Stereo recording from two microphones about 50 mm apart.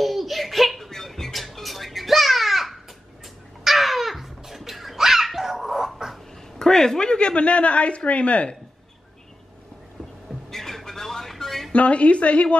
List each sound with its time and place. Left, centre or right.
0.0 s music: centre
3.6 s babbling: centre
4.4 s dog: centre
6.6 s speech: centre
10.5 s a sound: centre
11.7 s speech: left